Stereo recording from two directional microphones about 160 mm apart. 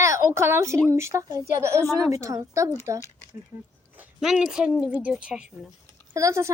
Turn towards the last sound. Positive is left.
turn(degrees=-20)  # may be behind; listen again after turning